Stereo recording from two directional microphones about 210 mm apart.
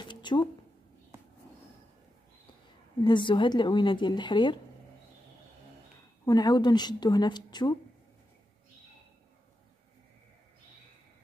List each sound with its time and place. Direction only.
0.0 s a sound: 20° left (ahead or behind)
3.0 s speech: 20° left (ahead or behind)
6.2 s speech: 20° left (ahead or behind)